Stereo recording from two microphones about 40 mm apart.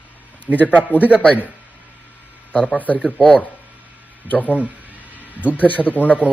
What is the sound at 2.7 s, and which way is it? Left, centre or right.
Speech, left.